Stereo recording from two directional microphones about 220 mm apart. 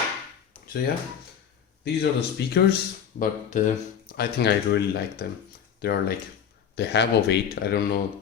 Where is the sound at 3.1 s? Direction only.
35° left (ahead or behind).